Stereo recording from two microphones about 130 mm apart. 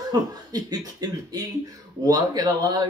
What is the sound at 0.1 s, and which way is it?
A man's voice, 30° right (ahead or behind).